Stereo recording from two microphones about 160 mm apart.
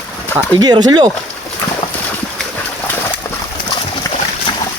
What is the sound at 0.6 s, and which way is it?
Speech, 25° right (ahead or behind).